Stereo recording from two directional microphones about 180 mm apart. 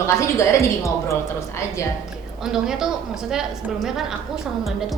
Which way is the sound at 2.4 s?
5° right (ahead or behind).